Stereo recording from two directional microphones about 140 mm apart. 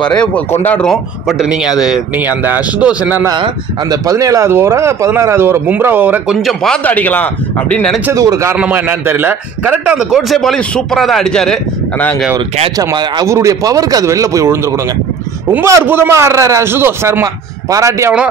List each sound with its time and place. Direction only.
0.0 s speech: 5° left (ahead or behind)
1.4 s speech: 5° right (ahead or behind)
3.9 s speech: 25° right (ahead or behind)
6.3 s a man's voice: 5° left (ahead or behind)
8.1 s a man's voice: 25° right (ahead or behind)
8.5 s a man's voice: 10° right (ahead or behind)
12.7 s a man's voice: 25° right (ahead or behind)
15.6 s a man's voice: 20° right (ahead or behind)